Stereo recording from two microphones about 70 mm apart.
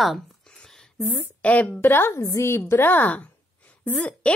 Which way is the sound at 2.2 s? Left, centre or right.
Left.